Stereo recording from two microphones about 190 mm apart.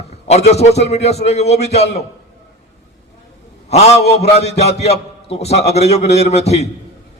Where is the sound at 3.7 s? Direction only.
35° left (ahead or behind).